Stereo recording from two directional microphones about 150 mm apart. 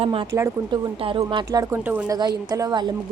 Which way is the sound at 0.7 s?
30° right (ahead or behind).